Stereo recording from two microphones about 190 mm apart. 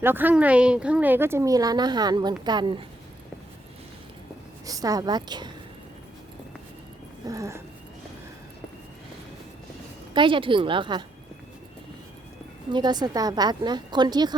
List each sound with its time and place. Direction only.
0.0 s a woman's voice: 10° right (ahead or behind)
4.6 s a woman's voice: 20° right (ahead or behind)
7.3 s speech: 15° right (ahead or behind)
10.2 s a woman's voice: 25° right (ahead or behind)
12.7 s a woman's voice: 20° right (ahead or behind)